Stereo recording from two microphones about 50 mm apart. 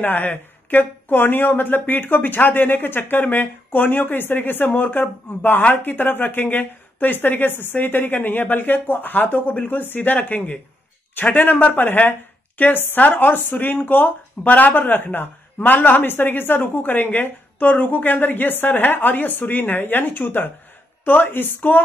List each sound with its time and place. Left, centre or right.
0.0 s speech: left